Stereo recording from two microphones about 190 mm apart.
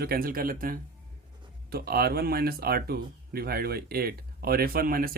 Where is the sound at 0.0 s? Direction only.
50° right (ahead or behind).